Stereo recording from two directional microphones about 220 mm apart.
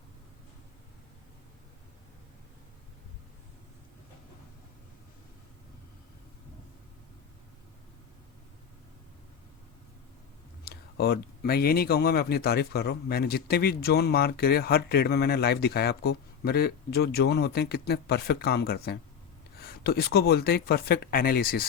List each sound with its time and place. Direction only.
10.6 s speech: 45° left (ahead or behind)